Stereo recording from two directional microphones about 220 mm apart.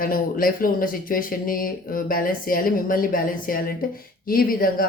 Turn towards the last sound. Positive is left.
turn(degrees=40)  # may be behind; listen again after turning